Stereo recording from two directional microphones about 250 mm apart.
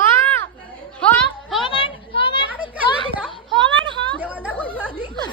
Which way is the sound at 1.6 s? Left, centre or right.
Centre.